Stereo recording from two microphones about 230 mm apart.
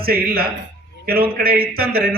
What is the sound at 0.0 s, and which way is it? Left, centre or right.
A man's voice, right.